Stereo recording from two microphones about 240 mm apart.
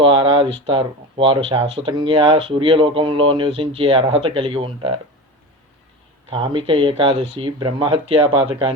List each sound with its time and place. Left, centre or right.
0.0 s speech: right
6.3 s speech: right